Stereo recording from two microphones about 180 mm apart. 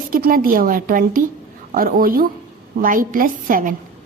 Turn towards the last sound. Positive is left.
turn(degrees=-50)  # may be behind; listen again after turning